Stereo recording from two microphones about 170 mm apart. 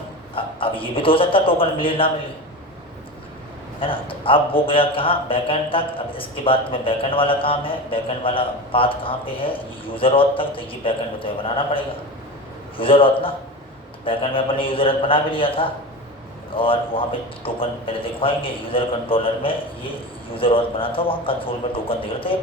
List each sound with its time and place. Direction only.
0.3 s a man's voice: 30° left (ahead or behind)
3.8 s a man's voice: 30° left (ahead or behind)